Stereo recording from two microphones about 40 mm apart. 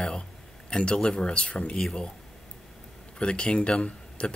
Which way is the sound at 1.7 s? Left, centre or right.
Centre.